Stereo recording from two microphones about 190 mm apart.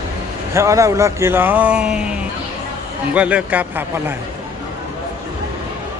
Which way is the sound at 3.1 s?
5° right (ahead or behind).